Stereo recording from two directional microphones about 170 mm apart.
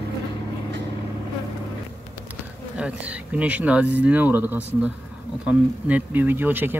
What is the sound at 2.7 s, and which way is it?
Speech, 5° right (ahead or behind).